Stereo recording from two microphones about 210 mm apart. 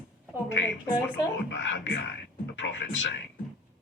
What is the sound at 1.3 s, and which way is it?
Speech, 65° left (ahead or behind).